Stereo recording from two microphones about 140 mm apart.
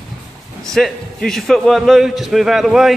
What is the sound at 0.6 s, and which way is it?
Speech, 5° left (ahead or behind).